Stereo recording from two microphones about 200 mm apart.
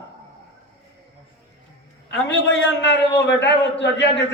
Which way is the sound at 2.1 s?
60° left (ahead or behind).